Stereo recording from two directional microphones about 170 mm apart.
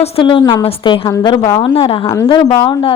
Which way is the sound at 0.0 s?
30° left (ahead or behind).